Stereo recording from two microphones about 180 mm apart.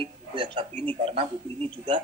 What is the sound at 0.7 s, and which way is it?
Speech, 10° left (ahead or behind).